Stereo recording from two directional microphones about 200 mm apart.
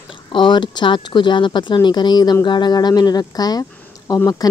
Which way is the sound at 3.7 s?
15° left (ahead or behind).